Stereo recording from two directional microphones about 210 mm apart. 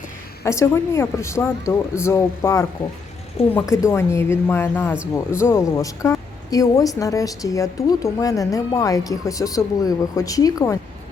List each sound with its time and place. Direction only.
0.4 s speech: 15° left (ahead or behind)
3.4 s speech: 30° left (ahead or behind)
3.8 s speech: 15° left (ahead or behind)